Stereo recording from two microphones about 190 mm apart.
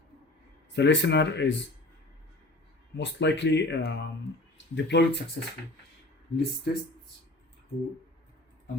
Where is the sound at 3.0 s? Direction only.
70° left (ahead or behind).